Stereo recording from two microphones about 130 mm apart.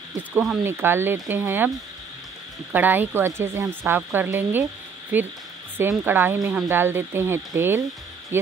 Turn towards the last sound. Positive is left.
turn(degrees=-15)  # may be behind; listen again after turning